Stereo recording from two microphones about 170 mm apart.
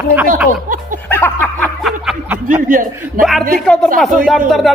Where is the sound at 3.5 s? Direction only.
5° left (ahead or behind).